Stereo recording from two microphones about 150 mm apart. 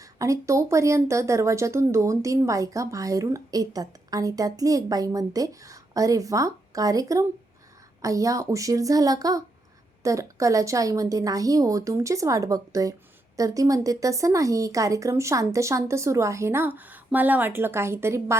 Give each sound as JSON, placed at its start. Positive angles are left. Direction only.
{"t": 0.0, "sound": "speech", "side_deg": -20}